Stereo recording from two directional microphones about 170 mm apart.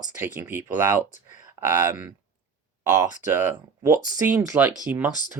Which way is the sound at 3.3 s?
10° right (ahead or behind).